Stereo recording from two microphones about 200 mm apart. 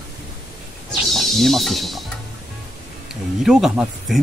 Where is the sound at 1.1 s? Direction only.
Centre (ahead or behind).